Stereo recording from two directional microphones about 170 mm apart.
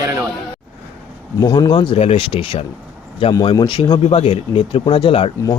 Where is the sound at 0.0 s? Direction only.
20° right (ahead or behind).